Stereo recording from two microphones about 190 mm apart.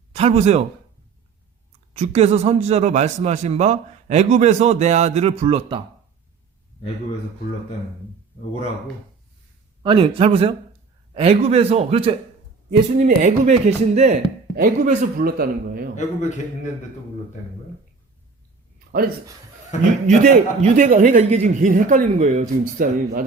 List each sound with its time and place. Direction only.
0.1 s a man's voice: 35° right (ahead or behind)
1.9 s a man's voice: 35° right (ahead or behind)
9.8 s a man's voice: 25° right (ahead or behind)
14.5 s a man's voice: 50° right (ahead or behind)
18.9 s speech: 55° right (ahead or behind)
19.7 s a man's voice: 40° left (ahead or behind)
20.1 s a man's voice: 45° right (ahead or behind)